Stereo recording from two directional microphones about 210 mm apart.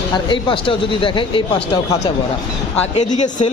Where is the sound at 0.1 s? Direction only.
25° left (ahead or behind).